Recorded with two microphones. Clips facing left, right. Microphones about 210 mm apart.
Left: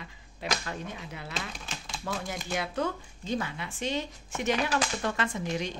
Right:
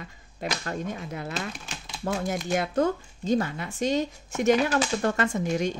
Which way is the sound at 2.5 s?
45° right (ahead or behind).